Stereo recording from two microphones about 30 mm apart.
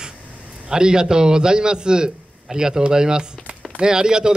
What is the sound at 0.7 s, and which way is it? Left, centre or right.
Speech, right.